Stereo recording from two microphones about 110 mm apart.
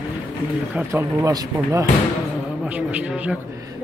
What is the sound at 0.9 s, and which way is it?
Speech, 25° right (ahead or behind).